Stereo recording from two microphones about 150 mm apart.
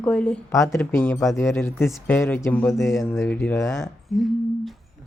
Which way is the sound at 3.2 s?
15° left (ahead or behind).